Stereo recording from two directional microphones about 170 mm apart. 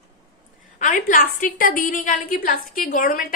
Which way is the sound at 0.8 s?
45° left (ahead or behind).